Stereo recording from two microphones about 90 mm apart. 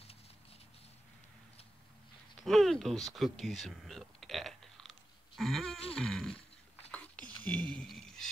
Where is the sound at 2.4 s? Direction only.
Centre (ahead or behind).